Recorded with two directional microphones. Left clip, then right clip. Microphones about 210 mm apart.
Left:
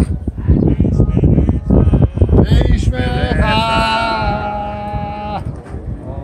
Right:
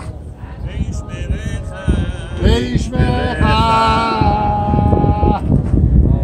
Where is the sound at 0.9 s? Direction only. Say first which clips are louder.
Left 11 dB; 30° right (ahead or behind).